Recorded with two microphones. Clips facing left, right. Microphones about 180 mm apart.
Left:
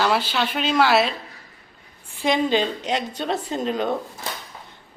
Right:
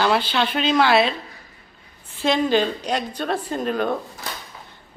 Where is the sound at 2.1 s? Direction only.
15° left (ahead or behind).